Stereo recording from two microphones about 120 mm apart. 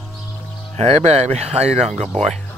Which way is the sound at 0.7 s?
65° right (ahead or behind).